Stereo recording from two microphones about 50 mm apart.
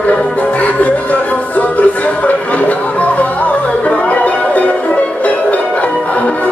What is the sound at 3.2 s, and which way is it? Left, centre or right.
Music, left.